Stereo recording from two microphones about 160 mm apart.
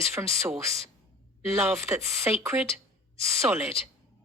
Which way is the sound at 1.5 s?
15° right (ahead or behind).